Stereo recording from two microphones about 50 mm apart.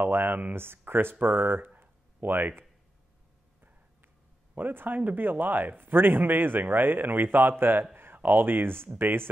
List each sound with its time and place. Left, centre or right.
0.0 s speech: right
1.8 s a sound: right
4.6 s speech: right